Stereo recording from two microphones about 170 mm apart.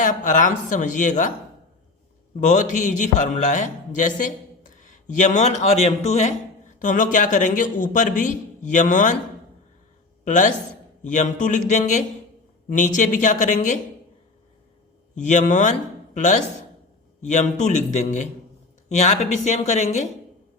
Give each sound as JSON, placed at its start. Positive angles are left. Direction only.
{"t": 0.0, "sound": "a man's voice", "side_deg": 50}
{"t": 2.3, "sound": "a man's voice", "side_deg": 45}
{"t": 10.2, "sound": "a man's voice", "side_deg": 50}
{"t": 15.2, "sound": "a man's voice", "side_deg": 45}